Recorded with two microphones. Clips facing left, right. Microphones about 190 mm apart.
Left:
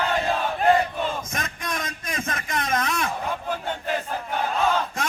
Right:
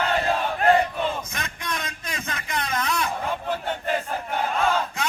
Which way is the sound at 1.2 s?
45° left (ahead or behind).